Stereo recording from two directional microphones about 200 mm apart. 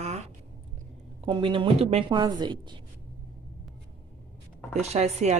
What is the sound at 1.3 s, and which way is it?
A woman's voice, 25° right (ahead or behind).